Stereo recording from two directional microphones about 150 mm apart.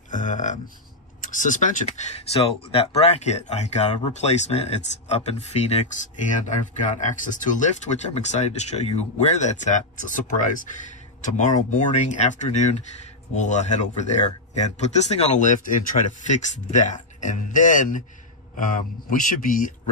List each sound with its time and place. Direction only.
0.1 s speech: 60° left (ahead or behind)